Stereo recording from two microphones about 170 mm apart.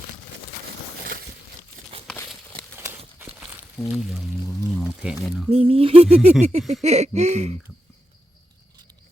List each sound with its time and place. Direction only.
3.2 s a sound: 10° right (ahead or behind)
3.8 s speech: centre (ahead or behind)
5.5 s speech: 35° right (ahead or behind)